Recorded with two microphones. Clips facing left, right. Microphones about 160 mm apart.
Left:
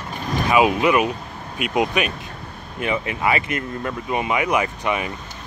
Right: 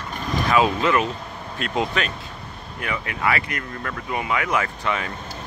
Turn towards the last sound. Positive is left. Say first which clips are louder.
# left 2 dB
turn(degrees=15)  # may be behind; listen again after turning